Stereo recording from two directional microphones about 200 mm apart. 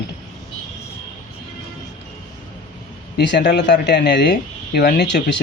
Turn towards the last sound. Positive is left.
turn(degrees=55)  # may be behind; listen again after turning